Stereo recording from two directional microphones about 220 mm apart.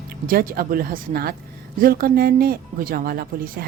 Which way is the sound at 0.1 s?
40° right (ahead or behind).